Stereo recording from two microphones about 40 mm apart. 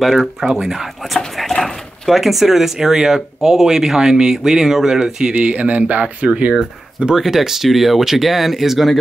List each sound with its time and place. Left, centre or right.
0.4 s speech: centre
5.3 s speech: right
7.2 s speech: centre